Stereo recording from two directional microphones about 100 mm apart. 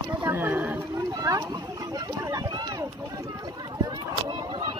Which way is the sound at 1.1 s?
40° right (ahead or behind).